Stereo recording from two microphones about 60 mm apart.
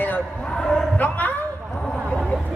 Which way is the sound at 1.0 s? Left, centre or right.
Left.